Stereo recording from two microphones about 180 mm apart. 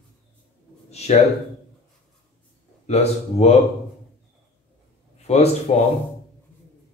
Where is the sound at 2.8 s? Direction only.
35° left (ahead or behind).